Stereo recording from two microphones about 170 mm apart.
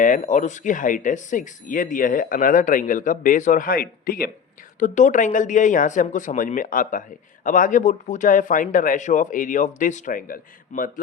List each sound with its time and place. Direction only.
0.0 s speech: 50° left (ahead or behind)